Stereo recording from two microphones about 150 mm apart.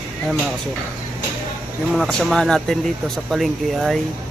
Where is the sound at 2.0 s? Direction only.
Centre (ahead or behind).